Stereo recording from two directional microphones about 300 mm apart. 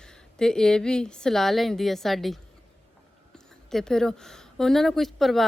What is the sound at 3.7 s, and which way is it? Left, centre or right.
A woman's voice, centre.